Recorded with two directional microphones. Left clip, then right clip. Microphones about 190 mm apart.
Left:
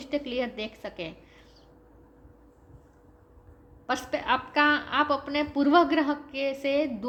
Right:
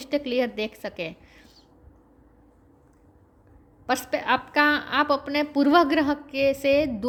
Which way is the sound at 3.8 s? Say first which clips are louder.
Right 3 dB; 60° right (ahead or behind).